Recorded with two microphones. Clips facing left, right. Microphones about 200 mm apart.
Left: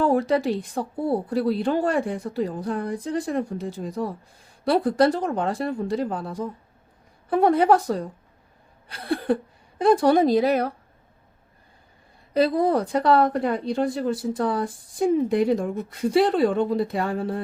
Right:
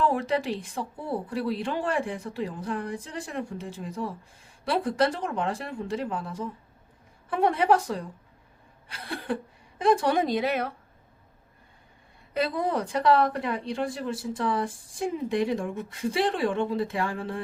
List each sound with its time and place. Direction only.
0.0 s a woman's voice: 40° left (ahead or behind)
12.3 s a woman's voice: 35° left (ahead or behind)